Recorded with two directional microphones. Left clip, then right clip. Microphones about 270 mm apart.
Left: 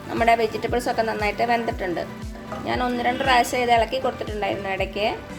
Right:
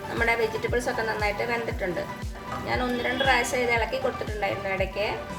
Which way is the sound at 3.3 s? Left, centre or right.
Left.